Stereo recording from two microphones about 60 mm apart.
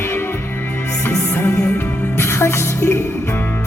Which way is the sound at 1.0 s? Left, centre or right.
Left.